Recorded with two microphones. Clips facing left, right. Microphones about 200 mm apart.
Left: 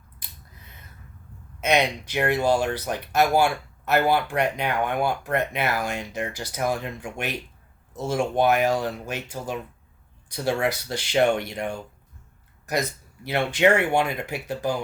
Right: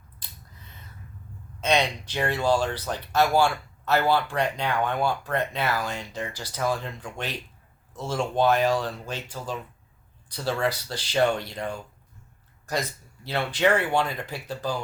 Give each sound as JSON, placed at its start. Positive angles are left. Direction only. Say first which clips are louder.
{"t": 1.6, "sound": "speech", "louder": "left 2 dB", "side_deg": 15}
{"t": 13.2, "sound": "speech", "louder": "left 3 dB", "side_deg": 15}